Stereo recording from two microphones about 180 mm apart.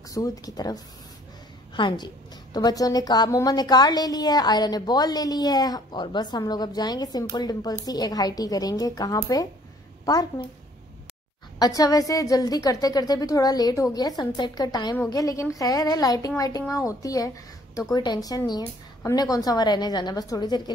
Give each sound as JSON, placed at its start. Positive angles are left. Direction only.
{"t": 0.1, "sound": "a woman's voice", "side_deg": 20}
{"t": 11.5, "sound": "a woman's voice", "side_deg": 20}